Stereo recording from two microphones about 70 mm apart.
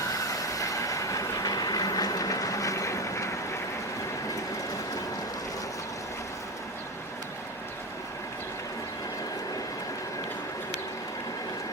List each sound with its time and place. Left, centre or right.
0.1 s train: left